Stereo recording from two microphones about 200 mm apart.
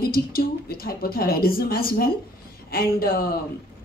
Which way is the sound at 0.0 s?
50° left (ahead or behind).